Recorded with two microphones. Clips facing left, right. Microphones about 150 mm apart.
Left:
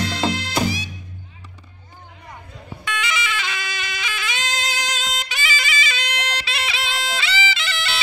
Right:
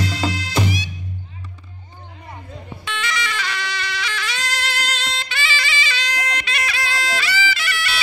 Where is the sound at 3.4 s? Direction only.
20° left (ahead or behind).